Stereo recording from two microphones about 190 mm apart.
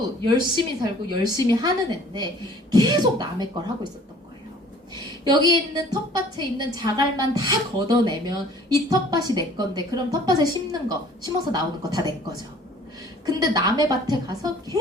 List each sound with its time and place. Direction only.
0.3 s a woman's voice: 25° right (ahead or behind)
2.7 s a woman's voice: 20° right (ahead or behind)
5.2 s a woman's voice: 20° right (ahead or behind)
13.2 s a woman's voice: 20° right (ahead or behind)